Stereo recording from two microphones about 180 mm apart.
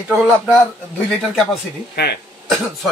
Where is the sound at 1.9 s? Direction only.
65° left (ahead or behind).